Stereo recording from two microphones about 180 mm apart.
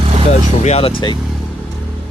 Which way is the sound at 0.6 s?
35° left (ahead or behind).